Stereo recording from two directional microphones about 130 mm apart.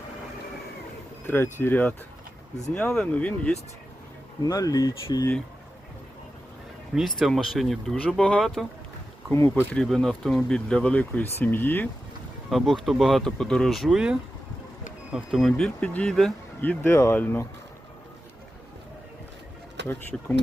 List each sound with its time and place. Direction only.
1.3 s speech: 15° left (ahead or behind)
4.4 s speech: 30° left (ahead or behind)
6.9 s speech: centre (ahead or behind)
9.3 s speech: 20° left (ahead or behind)
9.7 s speech: 5° left (ahead or behind)
12.5 s speech: centre (ahead or behind)
16.6 s speech: 15° left (ahead or behind)
20.1 s speech: 10° left (ahead or behind)